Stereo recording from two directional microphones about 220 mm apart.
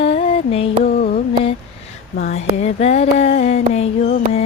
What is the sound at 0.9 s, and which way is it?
Mantra, 45° left (ahead or behind).